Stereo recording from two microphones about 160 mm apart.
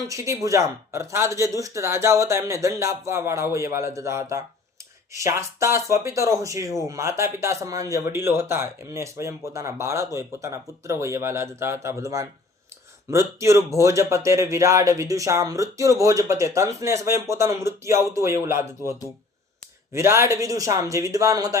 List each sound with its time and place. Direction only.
0.1 s speech: 20° right (ahead or behind)